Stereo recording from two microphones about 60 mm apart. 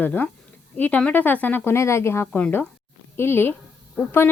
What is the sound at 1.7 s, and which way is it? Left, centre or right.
Speech, left.